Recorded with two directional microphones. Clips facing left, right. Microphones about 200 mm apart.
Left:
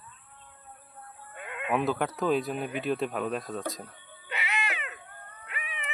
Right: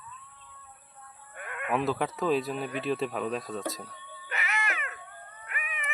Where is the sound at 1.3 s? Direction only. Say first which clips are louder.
Left 1 dB; 20° left (ahead or behind).